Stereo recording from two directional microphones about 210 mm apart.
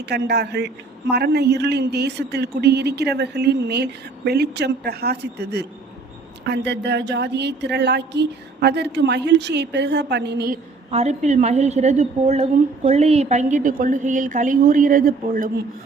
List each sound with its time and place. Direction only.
0.0 s speech: 50° right (ahead or behind)
10.9 s a woman's voice: 30° right (ahead or behind)